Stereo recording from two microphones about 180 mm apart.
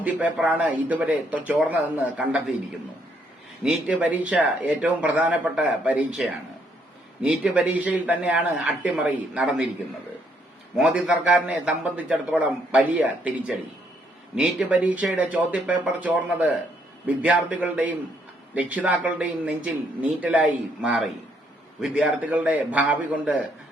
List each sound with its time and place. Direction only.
0.0 s speech: 10° right (ahead or behind)
3.6 s speech: 5° right (ahead or behind)
10.8 s a man's voice: 5° right (ahead or behind)
14.3 s speech: 5° right (ahead or behind)